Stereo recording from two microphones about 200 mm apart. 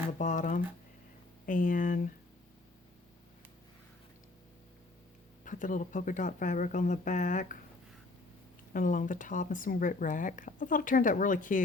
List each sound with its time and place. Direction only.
0.2 s speech: 40° left (ahead or behind)
5.5 s speech: 40° left (ahead or behind)
8.7 s speech: 45° left (ahead or behind)